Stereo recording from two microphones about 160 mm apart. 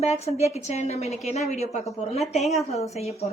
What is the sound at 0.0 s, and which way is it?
A woman's voice, 40° left (ahead or behind).